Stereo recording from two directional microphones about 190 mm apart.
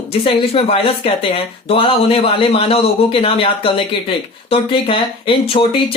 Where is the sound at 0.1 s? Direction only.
30° left (ahead or behind).